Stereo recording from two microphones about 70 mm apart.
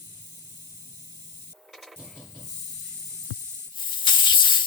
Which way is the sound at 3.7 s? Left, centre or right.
Left.